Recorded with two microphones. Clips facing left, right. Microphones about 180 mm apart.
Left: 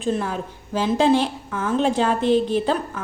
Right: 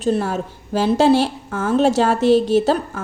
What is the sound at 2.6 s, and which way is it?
Speech, 45° right (ahead or behind).